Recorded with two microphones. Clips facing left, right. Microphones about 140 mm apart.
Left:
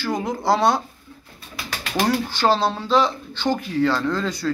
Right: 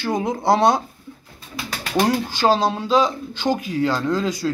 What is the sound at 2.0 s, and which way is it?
Speech, 15° right (ahead or behind).